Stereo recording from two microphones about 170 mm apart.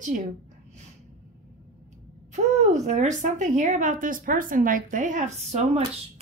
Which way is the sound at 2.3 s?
45° right (ahead or behind).